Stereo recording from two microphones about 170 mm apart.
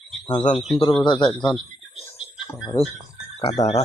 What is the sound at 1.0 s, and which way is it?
Speech, 25° left (ahead or behind).